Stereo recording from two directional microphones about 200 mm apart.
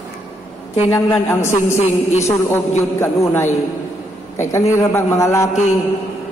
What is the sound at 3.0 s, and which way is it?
Speech, 15° left (ahead or behind).